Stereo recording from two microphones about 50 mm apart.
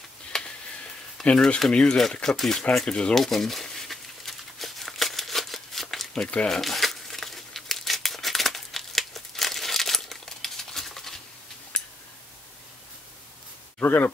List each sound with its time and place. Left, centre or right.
0.3 s a sound: centre
1.2 s speech: left
2.3 s speech: centre
2.9 s speech: centre
3.2 s crumpling: centre
6.2 s speech: left
6.5 s crumpling: centre
11.7 s a sound: left
13.7 s speech: left